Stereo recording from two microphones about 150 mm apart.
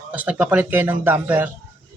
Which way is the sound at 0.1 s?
10° right (ahead or behind).